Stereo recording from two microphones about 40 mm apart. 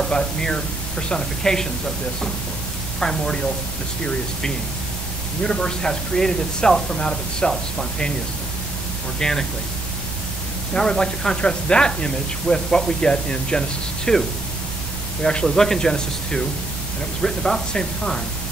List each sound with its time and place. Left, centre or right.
0.1 s speech: centre
3.0 s speech: centre
5.4 s speech: left
9.2 s speech: centre
10.7 s speech: centre
15.2 s speech: centre